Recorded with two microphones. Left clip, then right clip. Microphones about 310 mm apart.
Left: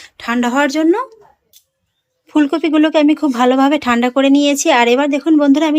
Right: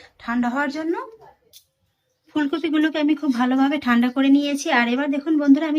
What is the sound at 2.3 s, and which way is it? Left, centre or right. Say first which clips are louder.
Speech: left 8 dB; centre.